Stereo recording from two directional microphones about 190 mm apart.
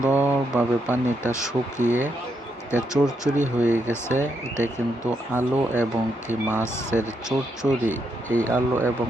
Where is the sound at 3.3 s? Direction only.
40° right (ahead or behind).